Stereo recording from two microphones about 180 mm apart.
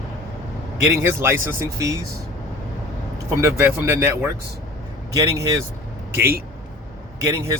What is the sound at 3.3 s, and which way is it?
Speech, 15° right (ahead or behind).